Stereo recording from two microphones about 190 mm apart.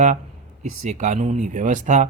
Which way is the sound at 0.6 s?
40° right (ahead or behind).